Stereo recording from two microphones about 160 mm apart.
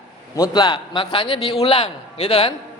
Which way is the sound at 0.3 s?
25° left (ahead or behind).